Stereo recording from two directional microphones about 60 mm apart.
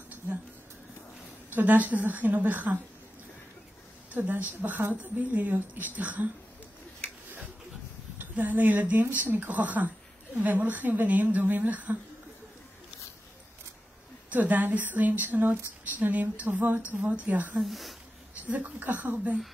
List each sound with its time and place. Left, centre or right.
1.5 s speech: right
4.1 s a woman's voice: right
8.2 s speech: right
14.3 s speech: right
17.6 s speech: centre
18.5 s speech: right